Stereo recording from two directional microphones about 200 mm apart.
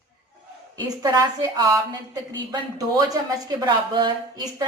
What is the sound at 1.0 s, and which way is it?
Speech, 20° right (ahead or behind).